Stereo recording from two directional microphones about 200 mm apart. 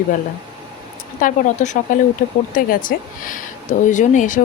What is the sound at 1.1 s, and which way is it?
Speech, 40° left (ahead or behind).